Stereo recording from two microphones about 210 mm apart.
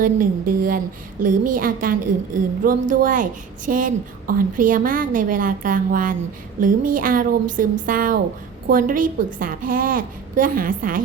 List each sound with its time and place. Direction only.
0.0 s a woman's voice: 40° right (ahead or behind)